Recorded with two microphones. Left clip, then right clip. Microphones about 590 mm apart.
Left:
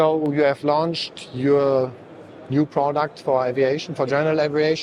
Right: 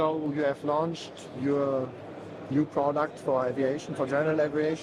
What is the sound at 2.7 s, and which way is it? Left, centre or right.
Speech, left.